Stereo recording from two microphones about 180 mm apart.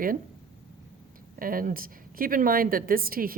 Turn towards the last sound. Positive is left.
turn(degrees=-55)  # may be behind; listen again after turning